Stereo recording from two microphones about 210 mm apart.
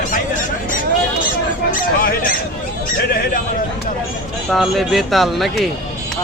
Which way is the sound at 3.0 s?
45° left (ahead or behind).